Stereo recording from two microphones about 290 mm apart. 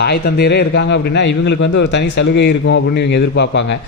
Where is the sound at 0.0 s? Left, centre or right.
Left.